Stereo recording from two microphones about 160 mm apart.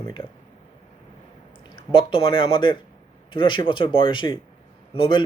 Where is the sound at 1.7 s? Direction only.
30° left (ahead or behind).